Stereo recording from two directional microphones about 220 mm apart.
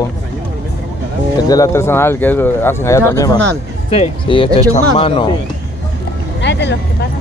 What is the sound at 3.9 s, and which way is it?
Speech, 25° left (ahead or behind).